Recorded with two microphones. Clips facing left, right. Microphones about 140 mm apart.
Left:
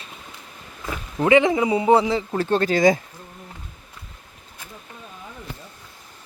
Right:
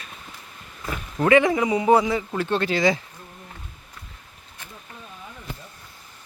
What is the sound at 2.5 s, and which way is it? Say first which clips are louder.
Speech: left 4 dB; 40° left (ahead or behind).